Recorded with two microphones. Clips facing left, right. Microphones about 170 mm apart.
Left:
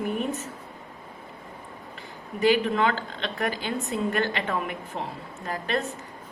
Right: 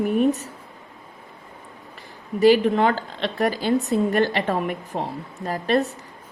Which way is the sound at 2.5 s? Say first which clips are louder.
Right 4 dB; 35° right (ahead or behind).